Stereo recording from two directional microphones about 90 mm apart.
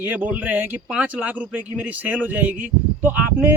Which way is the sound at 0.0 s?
20° right (ahead or behind).